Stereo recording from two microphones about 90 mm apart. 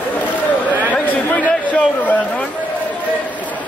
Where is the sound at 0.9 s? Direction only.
20° left (ahead or behind).